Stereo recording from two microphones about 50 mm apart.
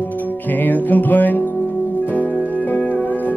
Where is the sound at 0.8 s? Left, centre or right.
Left.